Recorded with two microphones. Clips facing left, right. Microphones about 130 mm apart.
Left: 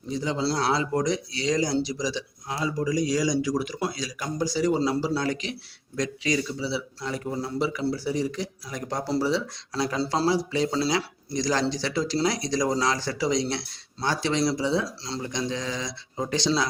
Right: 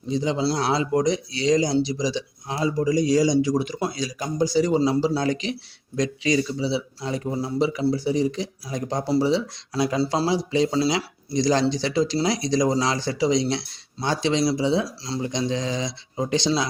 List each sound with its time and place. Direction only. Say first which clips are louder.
0.1 s a man's voice: right 4 dB; 20° right (ahead or behind)